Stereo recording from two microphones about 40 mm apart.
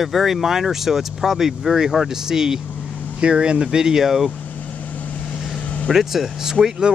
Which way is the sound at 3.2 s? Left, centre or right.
Right.